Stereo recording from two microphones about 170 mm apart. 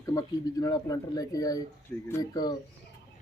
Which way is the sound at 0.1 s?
20° left (ahead or behind).